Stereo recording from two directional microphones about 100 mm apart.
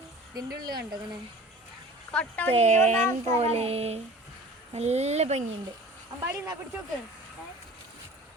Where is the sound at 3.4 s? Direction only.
90° right.